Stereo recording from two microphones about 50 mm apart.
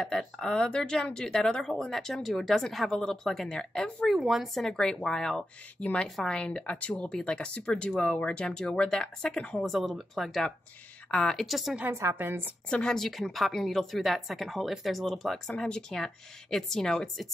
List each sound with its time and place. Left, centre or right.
0.1 s speech: centre
4.1 s speech: centre
4.6 s speech: centre
5.8 s a woman's voice: left
7.1 s speech: centre
7.3 s a woman's voice: left
9.7 s speech: centre
11.1 s speech: centre
11.3 s speech: centre
11.9 s a woman's voice: right
12.2 s a woman's voice: right
12.6 s speech: centre
15.5 s speech: centre